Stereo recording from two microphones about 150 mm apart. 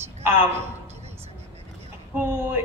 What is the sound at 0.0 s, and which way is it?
Speech, 15° right (ahead or behind).